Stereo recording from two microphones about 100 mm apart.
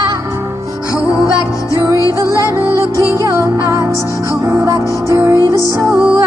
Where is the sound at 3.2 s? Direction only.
30° right (ahead or behind).